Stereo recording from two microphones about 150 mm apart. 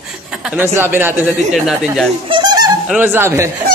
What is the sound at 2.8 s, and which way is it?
Speech, 10° right (ahead or behind).